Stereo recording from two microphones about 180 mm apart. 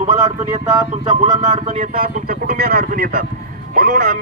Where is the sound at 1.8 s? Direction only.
55° right (ahead or behind).